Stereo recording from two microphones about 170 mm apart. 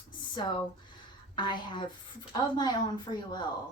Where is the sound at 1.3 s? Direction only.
25° left (ahead or behind).